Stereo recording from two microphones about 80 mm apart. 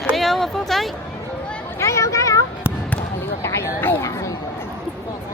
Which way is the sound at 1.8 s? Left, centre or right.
Left.